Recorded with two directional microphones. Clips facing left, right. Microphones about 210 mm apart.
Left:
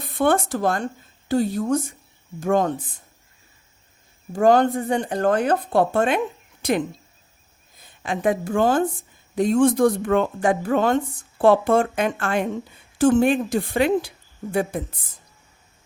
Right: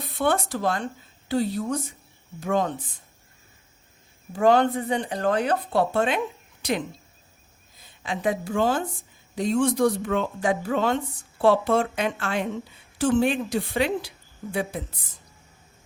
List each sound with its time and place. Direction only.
0.0 s speech: 50° left (ahead or behind)
4.3 s a woman's voice: 45° left (ahead or behind)